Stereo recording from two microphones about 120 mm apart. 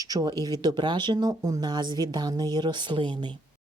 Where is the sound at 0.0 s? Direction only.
30° right (ahead or behind).